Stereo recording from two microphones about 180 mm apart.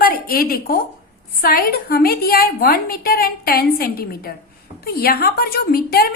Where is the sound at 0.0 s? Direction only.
55° left (ahead or behind).